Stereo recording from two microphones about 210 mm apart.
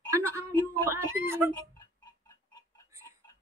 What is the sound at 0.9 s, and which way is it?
Speech, 10° right (ahead or behind).